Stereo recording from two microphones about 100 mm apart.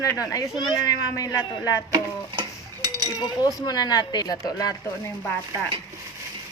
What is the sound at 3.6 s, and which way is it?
A woman's voice, 45° left (ahead or behind).